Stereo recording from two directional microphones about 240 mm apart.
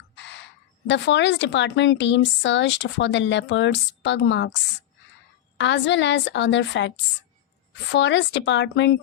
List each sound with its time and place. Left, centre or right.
0.2 s a sound: left
0.9 s speech: left
5.5 s speech: left
7.9 s speech: left